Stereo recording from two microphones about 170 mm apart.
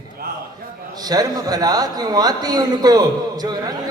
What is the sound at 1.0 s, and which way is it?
A man's voice, 20° right (ahead or behind).